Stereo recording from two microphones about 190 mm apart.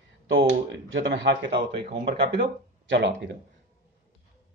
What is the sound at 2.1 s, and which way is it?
Speech, 65° right (ahead or behind).